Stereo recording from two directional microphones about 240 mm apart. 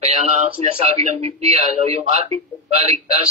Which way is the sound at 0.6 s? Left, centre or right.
Right.